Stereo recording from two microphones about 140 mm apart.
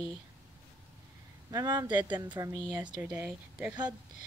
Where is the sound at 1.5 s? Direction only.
25° right (ahead or behind).